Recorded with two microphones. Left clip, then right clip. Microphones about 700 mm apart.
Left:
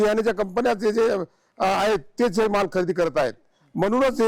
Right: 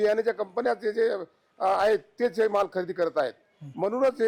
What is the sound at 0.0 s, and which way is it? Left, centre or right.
A man's voice, left.